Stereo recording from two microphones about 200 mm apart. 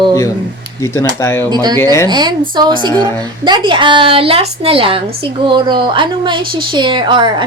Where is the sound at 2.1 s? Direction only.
20° right (ahead or behind).